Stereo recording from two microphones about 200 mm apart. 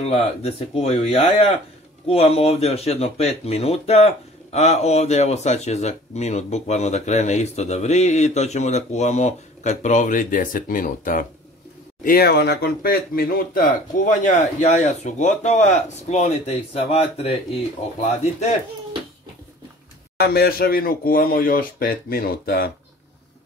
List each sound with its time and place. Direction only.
0.1 s speech: 30° left (ahead or behind)
20.2 s speech: 50° left (ahead or behind)